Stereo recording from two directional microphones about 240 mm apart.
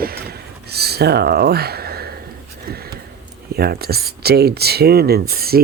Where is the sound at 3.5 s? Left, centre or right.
Right.